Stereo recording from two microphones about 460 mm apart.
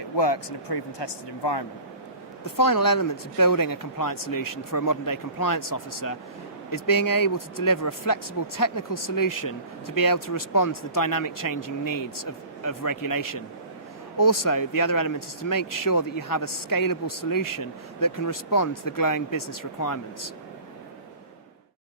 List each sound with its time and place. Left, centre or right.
0.2 s speech: left
2.4 s speech: left